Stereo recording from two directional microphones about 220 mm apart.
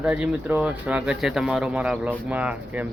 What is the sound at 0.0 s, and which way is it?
Speech, 5° right (ahead or behind).